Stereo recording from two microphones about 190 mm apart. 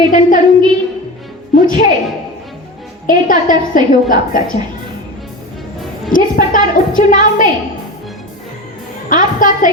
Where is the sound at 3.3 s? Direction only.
20° right (ahead or behind).